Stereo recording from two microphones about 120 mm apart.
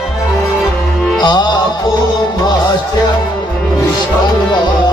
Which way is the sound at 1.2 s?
40° left (ahead or behind).